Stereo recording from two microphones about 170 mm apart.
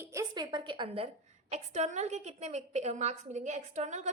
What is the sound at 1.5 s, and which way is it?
A woman's voice, 40° right (ahead or behind).